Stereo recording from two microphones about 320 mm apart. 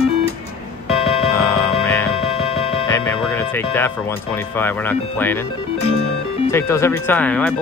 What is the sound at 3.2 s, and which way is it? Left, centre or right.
Speech, centre.